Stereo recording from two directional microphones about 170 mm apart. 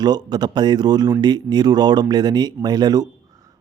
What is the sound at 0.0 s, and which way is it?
A man's voice, 25° right (ahead or behind).